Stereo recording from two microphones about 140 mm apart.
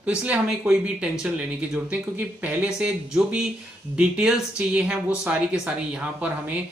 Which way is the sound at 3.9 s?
5° right (ahead or behind).